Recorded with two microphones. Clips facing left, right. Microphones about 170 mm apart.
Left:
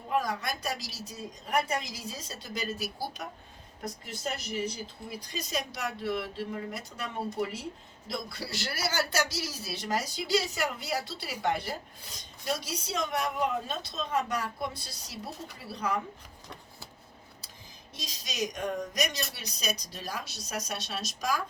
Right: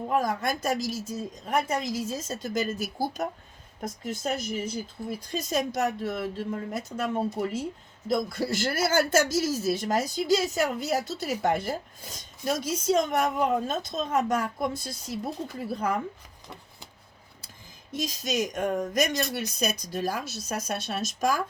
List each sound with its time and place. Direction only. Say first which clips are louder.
0.1 s speech: right 3 dB; 45° right (ahead or behind)
17.9 s speech: right 11 dB; 50° right (ahead or behind)